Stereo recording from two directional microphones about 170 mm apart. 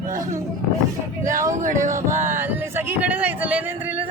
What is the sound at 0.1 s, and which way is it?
Speech, 55° right (ahead or behind).